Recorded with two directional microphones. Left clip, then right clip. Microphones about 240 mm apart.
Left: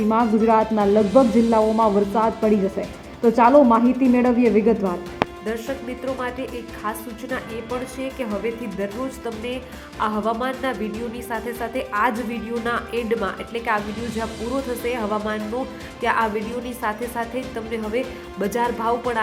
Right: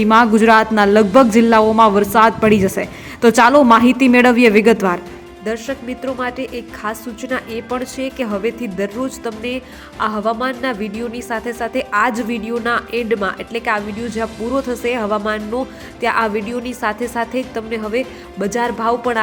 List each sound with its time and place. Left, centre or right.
0.1 s a woman's voice: centre
4.7 s speech: right
6.1 s a woman's voice: centre